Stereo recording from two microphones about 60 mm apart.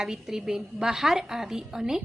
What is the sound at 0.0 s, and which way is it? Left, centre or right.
A woman's voice, centre.